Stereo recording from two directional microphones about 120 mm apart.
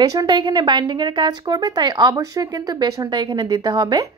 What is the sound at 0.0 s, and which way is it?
Speech, 35° right (ahead or behind).